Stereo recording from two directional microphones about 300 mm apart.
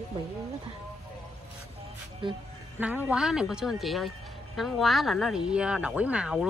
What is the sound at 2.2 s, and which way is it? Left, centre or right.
Speech, centre.